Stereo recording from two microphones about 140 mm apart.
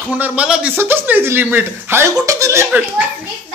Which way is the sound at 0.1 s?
10° right (ahead or behind).